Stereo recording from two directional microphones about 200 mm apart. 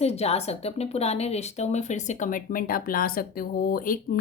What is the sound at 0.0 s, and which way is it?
A woman's voice, 30° left (ahead or behind).